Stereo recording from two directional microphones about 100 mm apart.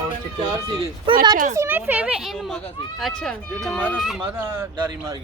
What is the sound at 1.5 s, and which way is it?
Speech, 20° right (ahead or behind).